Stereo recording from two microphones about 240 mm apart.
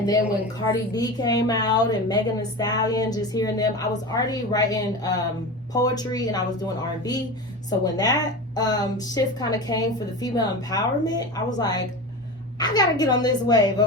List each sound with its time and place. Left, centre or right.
0.6 s a woman's voice: centre